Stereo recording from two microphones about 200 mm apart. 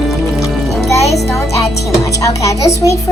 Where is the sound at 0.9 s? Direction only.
15° left (ahead or behind).